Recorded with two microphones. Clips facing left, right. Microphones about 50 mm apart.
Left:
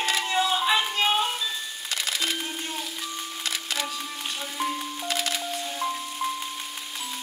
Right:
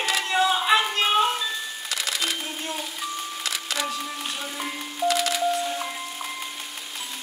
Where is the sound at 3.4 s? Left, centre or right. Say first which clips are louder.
Right 1 dB; right.